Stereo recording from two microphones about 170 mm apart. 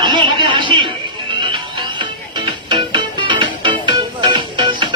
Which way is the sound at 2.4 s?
30° right (ahead or behind).